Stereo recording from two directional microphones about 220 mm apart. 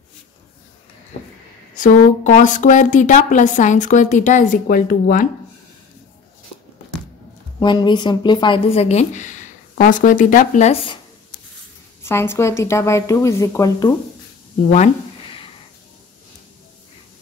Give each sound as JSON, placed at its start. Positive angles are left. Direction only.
{"t": 1.8, "sound": "a woman's voice", "side_deg": 35}
{"t": 7.6, "sound": "a woman's voice", "side_deg": 20}
{"t": 12.0, "sound": "speech", "side_deg": 10}